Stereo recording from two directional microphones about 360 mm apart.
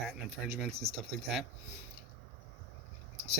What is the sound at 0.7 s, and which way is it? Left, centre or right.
Speech, centre.